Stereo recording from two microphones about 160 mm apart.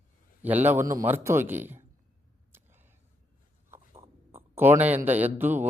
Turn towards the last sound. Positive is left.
turn(degrees=-10)  # may be behind; listen again after turning